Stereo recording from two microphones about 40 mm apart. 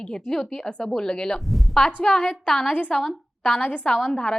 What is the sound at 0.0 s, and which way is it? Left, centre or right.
A woman's voice, centre.